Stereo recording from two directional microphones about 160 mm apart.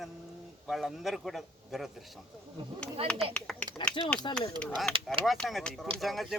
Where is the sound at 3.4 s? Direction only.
5° left (ahead or behind).